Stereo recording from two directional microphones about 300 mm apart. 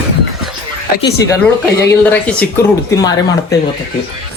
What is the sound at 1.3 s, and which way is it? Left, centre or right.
Speech, centre.